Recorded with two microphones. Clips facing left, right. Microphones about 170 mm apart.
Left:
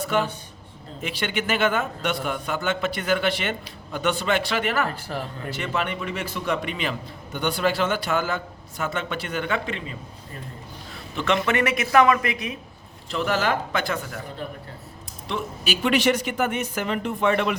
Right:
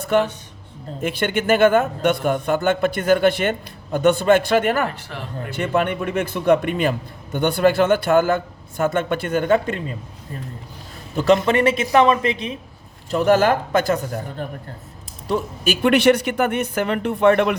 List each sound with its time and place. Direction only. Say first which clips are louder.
0.0 s a man's voice: right 5 dB; 50° right (ahead or behind)
4.9 s speech: left 2 dB; 35° left (ahead or behind)
5.5 s a man's voice: right 7 dB; 50° right (ahead or behind)
11.1 s a woman's voice: right 7 dB; 40° right (ahead or behind)
13.1 s a man's voice: right 8 dB; 45° right (ahead or behind)